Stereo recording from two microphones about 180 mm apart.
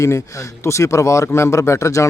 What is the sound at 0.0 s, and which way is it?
A man's voice, 15° left (ahead or behind).